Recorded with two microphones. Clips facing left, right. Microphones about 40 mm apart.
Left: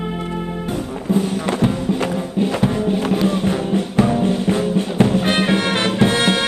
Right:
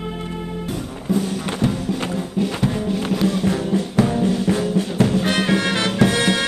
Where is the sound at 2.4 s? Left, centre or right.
Left.